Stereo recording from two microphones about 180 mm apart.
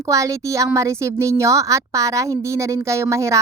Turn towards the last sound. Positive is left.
turn(degrees=-15)  # may be behind; listen again after turning